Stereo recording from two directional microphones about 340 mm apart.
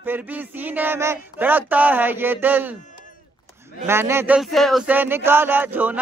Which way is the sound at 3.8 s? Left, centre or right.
Centre.